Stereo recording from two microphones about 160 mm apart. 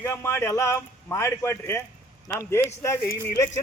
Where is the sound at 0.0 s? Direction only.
15° left (ahead or behind).